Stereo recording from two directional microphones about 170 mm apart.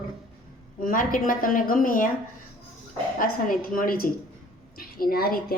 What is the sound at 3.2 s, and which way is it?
A woman's voice, 55° left (ahead or behind).